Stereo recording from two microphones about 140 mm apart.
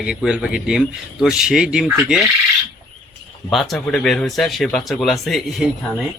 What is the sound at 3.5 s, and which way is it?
A man's voice, centre (ahead or behind).